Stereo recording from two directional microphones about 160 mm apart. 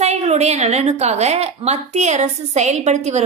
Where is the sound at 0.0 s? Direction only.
45° right (ahead or behind).